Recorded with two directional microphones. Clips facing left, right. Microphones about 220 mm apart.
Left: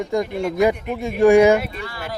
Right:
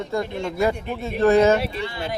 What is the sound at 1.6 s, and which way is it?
Speech, 30° right (ahead or behind).